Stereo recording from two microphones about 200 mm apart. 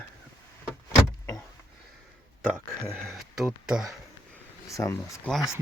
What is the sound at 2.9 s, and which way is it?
Speech, centre (ahead or behind).